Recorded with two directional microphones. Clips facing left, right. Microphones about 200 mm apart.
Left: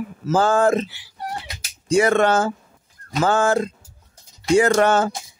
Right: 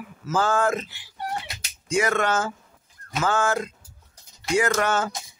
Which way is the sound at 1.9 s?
30° left (ahead or behind).